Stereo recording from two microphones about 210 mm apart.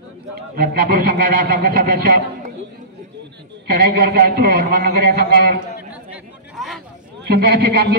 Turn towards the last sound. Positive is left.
turn(degrees=-50)  # may be behind; listen again after turning